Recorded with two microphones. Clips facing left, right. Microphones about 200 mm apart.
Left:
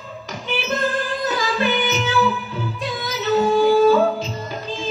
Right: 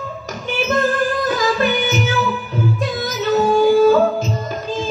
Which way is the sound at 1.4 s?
45° right (ahead or behind).